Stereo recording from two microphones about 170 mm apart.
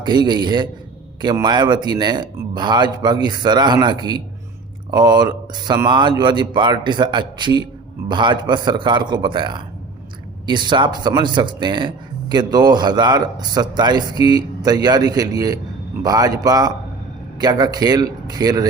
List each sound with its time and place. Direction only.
0.0 s speech: 25° right (ahead or behind)